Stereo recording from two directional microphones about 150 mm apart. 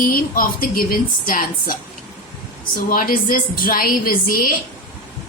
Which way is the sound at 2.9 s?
70° left (ahead or behind).